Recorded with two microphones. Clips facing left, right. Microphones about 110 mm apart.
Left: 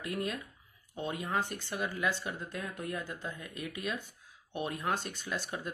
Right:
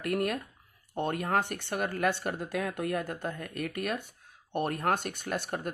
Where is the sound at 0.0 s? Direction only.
65° right (ahead or behind).